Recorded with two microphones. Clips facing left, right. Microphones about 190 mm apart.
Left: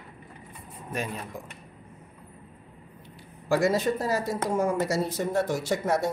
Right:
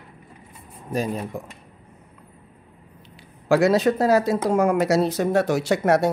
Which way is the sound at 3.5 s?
75° right (ahead or behind).